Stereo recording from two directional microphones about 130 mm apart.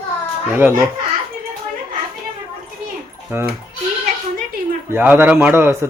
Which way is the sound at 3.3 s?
15° right (ahead or behind).